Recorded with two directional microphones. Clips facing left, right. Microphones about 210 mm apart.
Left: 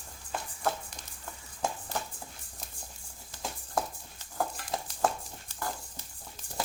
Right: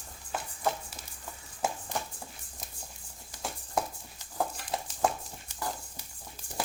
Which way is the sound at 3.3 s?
5° right (ahead or behind).